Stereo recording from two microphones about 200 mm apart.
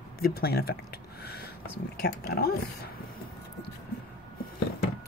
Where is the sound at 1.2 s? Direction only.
50° left (ahead or behind).